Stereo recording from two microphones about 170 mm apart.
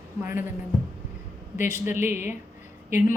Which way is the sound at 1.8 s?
15° right (ahead or behind).